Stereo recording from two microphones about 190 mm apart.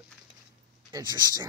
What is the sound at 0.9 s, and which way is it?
Speech, 20° right (ahead or behind).